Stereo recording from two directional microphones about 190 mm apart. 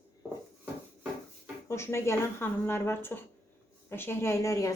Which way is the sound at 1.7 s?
15° left (ahead or behind).